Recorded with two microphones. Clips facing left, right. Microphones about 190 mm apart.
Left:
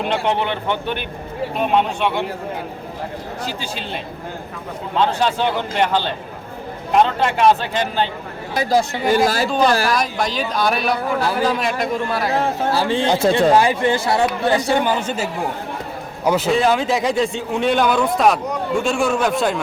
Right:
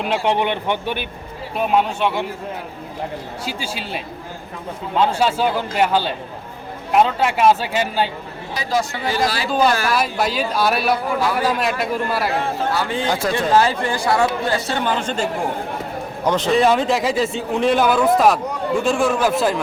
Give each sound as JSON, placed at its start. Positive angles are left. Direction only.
{"t": 0.0, "sound": "speech", "side_deg": -5}
{"t": 0.3, "sound": "a man's voice", "side_deg": -15}
{"t": 3.4, "sound": "a man's voice", "side_deg": -10}
{"t": 8.7, "sound": "speech", "side_deg": 25}
{"t": 9.0, "sound": "a man's voice", "side_deg": 50}
{"t": 9.9, "sound": "speech", "side_deg": -5}
{"t": 12.7, "sound": "speech", "side_deg": 30}